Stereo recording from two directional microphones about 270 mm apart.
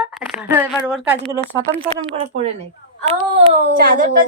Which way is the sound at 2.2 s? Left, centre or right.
Right.